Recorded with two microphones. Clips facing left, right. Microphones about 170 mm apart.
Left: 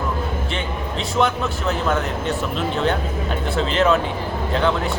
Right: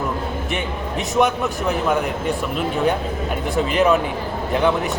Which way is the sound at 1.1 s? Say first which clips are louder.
Right 2 dB; 15° right (ahead or behind).